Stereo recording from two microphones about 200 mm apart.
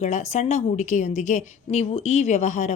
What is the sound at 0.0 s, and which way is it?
A woman's voice, 35° left (ahead or behind).